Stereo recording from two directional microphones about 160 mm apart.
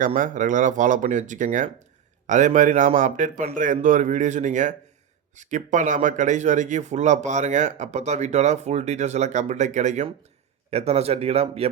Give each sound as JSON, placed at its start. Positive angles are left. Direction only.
{"t": 0.0, "sound": "speech", "side_deg": -55}